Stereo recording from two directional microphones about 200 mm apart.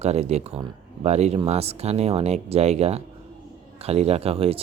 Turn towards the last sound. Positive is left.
turn(degrees=-30)  # may be behind; listen again after turning